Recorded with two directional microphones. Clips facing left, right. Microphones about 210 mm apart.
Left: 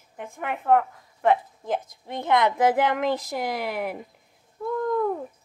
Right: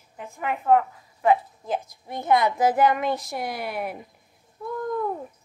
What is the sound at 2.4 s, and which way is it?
Speech, 60° left (ahead or behind).